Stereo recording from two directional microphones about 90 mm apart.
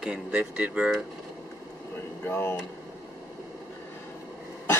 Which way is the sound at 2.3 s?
25° left (ahead or behind).